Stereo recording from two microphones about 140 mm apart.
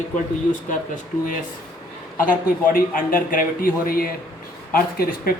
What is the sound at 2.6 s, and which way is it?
A man's voice, 90° left.